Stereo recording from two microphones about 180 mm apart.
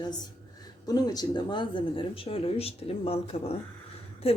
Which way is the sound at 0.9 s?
20° left (ahead or behind).